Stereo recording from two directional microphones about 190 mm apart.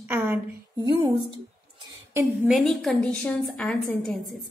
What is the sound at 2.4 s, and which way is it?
A woman's voice, centre (ahead or behind).